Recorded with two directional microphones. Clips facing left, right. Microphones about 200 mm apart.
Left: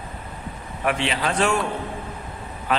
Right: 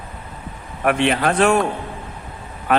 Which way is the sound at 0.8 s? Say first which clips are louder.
Right 6 dB; 55° right (ahead or behind).